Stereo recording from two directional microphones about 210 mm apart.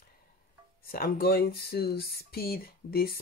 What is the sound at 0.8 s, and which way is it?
Speech, 45° left (ahead or behind).